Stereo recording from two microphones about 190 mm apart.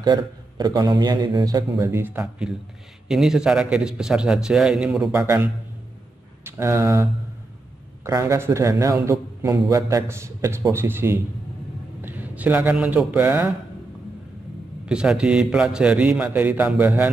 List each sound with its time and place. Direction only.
0.0 s a man's voice: 20° right (ahead or behind); by 5.1 s centre (ahead or behind)
5.1 s a man's voice: 15° right (ahead or behind)
6.4 s a man's voice: 15° right (ahead or behind)
14.9 s a man's voice: 5° right (ahead or behind)